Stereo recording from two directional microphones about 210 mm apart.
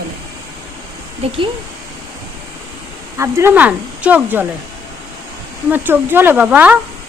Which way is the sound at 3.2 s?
15° right (ahead or behind).